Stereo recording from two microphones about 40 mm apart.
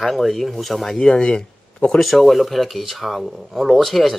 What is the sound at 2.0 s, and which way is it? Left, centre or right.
Speech, centre.